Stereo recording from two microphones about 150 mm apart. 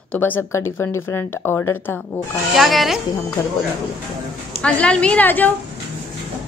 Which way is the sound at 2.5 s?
Centre (ahead or behind).